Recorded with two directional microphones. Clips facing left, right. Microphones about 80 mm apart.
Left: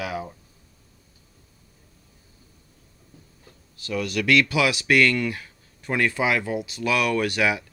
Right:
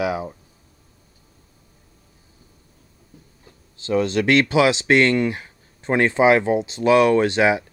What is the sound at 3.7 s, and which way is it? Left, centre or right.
Speech, right.